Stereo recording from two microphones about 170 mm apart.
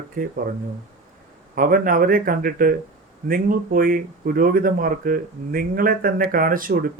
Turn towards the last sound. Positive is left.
turn(degrees=-55)  # may be behind; listen again after turning